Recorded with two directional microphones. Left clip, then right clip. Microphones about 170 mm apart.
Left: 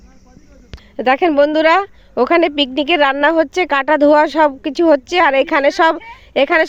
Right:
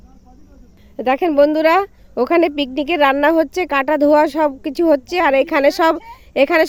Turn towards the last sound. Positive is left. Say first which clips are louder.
# left 1 dB
turn(degrees=-15)  # may be behind; listen again after turning